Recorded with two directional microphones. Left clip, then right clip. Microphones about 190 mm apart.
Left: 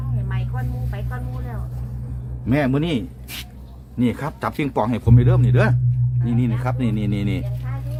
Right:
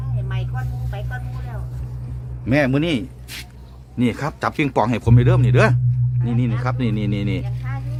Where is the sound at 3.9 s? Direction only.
25° right (ahead or behind).